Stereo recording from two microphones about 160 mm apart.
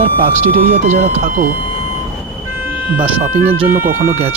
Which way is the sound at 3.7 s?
15° right (ahead or behind).